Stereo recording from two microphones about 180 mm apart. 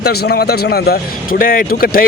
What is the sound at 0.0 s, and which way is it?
Speech, 60° left (ahead or behind).